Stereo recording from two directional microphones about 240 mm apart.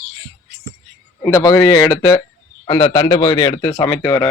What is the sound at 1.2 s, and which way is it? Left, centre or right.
A man's voice, centre.